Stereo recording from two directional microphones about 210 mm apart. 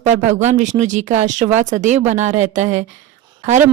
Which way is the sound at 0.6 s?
35° right (ahead or behind).